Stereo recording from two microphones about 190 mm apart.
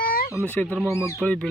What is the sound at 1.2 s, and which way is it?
Speech, 5° left (ahead or behind).